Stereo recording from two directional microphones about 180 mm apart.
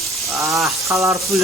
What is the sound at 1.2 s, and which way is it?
Speech, centre (ahead or behind).